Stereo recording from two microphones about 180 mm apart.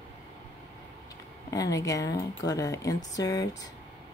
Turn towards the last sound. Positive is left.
turn(degrees=20)  # may be behind; listen again after turning